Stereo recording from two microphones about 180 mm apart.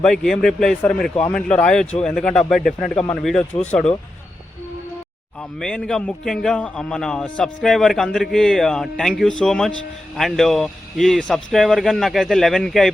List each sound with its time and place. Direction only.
0.0 s a man's voice: 5° left (ahead or behind)
5.4 s a man's voice: 5° left (ahead or behind)